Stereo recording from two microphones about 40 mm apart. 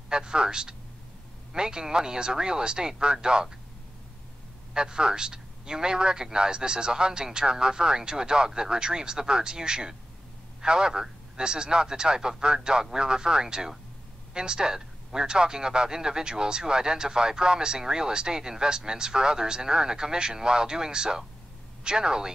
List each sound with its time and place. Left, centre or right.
0.1 s speech: right
4.7 s speech: centre